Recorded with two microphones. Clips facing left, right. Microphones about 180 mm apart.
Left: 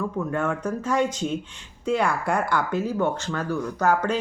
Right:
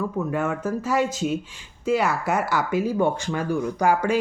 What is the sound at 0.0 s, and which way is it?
Speech, 5° right (ahead or behind).